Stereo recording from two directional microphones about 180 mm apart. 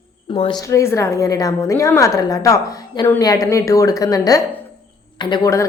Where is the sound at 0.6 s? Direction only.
15° left (ahead or behind).